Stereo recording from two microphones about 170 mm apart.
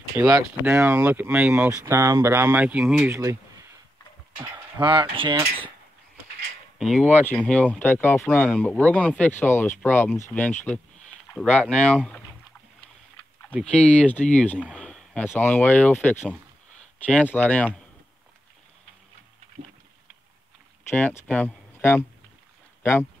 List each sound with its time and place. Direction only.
0.2 s speech: 15° right (ahead or behind)
3.1 s speech: 20° right (ahead or behind)
4.7 s speech: 30° right (ahead or behind)
6.8 s speech: centre (ahead or behind)
13.6 s speech: 5° left (ahead or behind)
20.9 s speech: 10° left (ahead or behind)